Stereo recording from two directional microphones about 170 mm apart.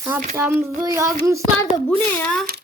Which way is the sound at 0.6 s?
15° right (ahead or behind).